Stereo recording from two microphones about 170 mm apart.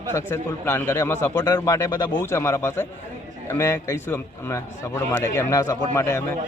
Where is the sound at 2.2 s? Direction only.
15° left (ahead or behind).